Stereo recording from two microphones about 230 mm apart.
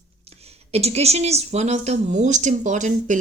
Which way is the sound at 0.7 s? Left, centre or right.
Right.